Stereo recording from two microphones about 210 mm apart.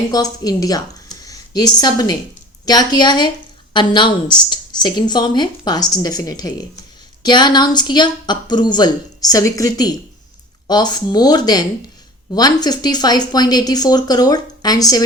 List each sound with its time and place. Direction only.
0.1 s a woman's voice: 15° left (ahead or behind)